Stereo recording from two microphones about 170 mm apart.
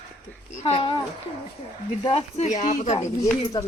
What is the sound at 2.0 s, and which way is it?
Speech, 35° left (ahead or behind).